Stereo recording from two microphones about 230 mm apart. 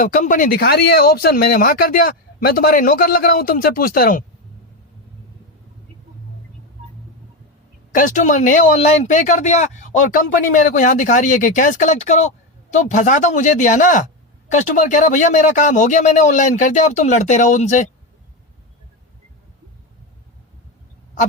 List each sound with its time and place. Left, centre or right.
0.0 s speech: left
7.9 s speech: left